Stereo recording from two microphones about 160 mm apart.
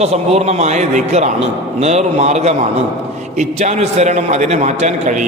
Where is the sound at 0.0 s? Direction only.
40° right (ahead or behind).